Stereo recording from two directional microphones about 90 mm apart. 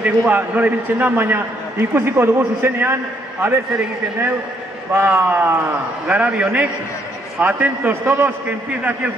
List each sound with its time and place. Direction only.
0.0 s a man's voice: 20° right (ahead or behind)
4.9 s a man's voice: 25° right (ahead or behind)
8.0 s a man's voice: 30° right (ahead or behind)
8.5 s a man's voice: 15° right (ahead or behind)